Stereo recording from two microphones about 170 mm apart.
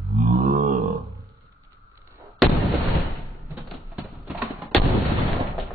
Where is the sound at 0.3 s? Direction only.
50° right (ahead or behind).